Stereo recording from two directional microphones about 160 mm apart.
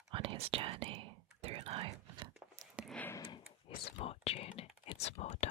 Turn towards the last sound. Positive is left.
turn(degrees=45)  # may be behind; listen again after turning